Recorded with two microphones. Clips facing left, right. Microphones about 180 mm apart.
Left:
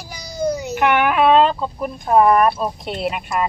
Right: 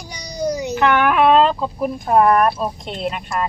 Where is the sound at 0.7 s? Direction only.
15° left (ahead or behind).